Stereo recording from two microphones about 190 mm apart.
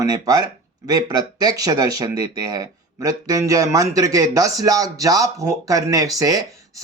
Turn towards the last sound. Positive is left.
turn(degrees=-20)  # may be behind; listen again after turning